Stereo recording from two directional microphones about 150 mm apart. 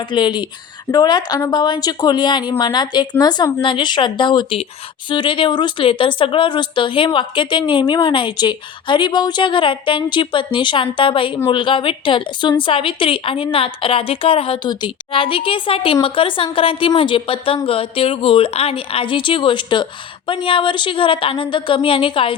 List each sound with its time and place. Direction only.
0.1 s a woman's voice: 30° left (ahead or behind)